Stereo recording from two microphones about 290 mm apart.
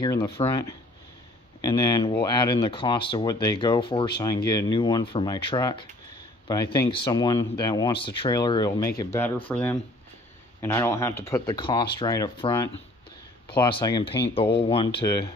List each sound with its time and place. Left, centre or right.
0.0 s speech: centre